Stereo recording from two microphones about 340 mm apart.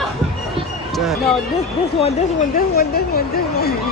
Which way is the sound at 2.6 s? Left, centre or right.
Left.